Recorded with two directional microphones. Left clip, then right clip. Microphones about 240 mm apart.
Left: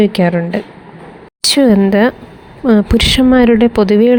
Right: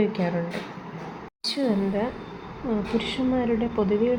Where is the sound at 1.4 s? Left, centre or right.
Left.